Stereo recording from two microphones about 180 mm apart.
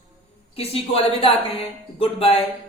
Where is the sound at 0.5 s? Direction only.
35° left (ahead or behind).